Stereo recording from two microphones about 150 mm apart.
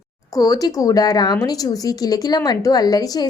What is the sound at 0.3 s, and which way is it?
A woman's voice, 25° left (ahead or behind).